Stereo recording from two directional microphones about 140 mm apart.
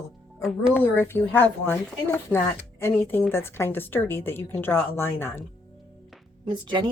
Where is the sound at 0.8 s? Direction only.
15° left (ahead or behind).